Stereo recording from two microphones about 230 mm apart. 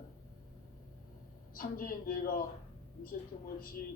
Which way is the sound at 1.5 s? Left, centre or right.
Left.